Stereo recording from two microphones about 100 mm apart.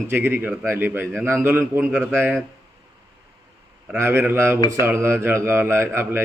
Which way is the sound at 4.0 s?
20° right (ahead or behind).